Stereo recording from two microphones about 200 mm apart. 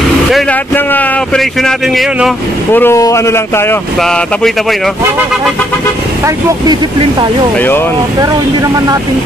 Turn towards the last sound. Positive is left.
turn(degrees=10)  # may be behind; listen again after turning